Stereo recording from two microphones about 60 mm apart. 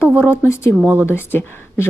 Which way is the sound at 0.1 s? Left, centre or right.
Right.